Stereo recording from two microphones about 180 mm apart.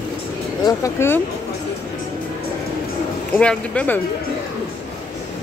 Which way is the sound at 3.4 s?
5° left (ahead or behind).